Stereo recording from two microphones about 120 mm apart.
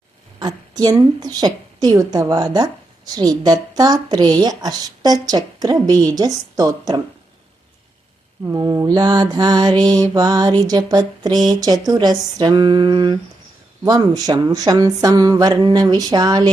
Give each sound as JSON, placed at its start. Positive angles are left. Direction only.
{"t": 0.3, "sound": "a woman's voice", "side_deg": -35}
{"t": 8.5, "sound": "a woman's voice", "side_deg": -30}